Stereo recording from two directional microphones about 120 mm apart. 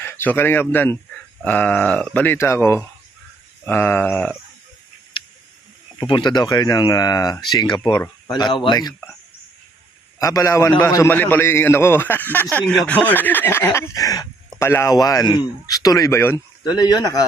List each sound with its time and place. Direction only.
0.0 s a man's voice: 15° left (ahead or behind)
6.0 s speech: 40° left (ahead or behind)
10.2 s a man's voice: 25° left (ahead or behind)
16.6 s speech: 35° left (ahead or behind)